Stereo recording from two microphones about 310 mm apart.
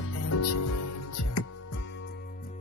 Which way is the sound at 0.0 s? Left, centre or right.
Left.